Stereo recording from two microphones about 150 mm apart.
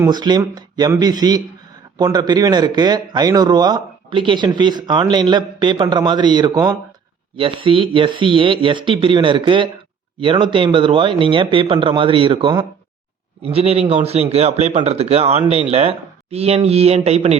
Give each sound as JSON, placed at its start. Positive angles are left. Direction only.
{"t": 0.0, "sound": "a man's voice", "side_deg": -30}